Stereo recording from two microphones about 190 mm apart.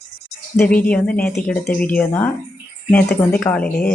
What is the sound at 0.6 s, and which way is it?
Speech, 10° left (ahead or behind).